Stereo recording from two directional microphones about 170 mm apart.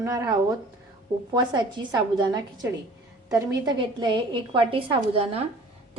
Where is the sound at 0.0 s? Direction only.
20° right (ahead or behind).